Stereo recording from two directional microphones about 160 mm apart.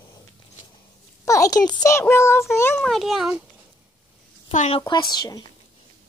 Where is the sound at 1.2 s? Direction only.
20° left (ahead or behind).